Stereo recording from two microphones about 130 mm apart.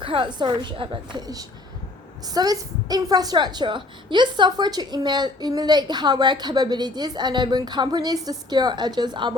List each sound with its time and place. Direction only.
0.0 s a woman's voice: 40° right (ahead or behind)